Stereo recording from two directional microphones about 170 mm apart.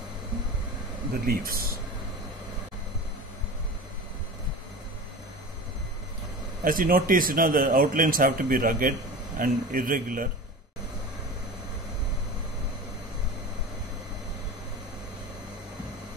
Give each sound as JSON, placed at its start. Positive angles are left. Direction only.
{"t": 1.2, "sound": "a man's voice", "side_deg": -60}
{"t": 6.6, "sound": "a man's voice", "side_deg": -55}